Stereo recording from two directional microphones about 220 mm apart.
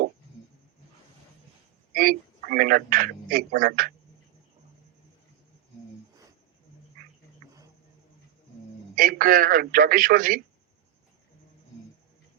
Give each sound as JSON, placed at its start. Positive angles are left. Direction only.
{"t": 1.9, "sound": "a man's voice", "side_deg": -40}
{"t": 9.0, "sound": "a man's voice", "side_deg": -40}